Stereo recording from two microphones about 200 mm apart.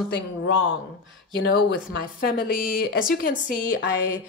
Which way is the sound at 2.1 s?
45° left (ahead or behind).